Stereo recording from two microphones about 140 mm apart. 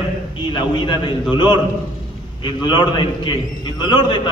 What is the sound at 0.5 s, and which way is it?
A man's voice, 30° left (ahead or behind).